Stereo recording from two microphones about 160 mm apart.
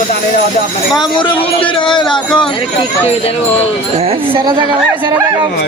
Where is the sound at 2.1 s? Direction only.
5° left (ahead or behind).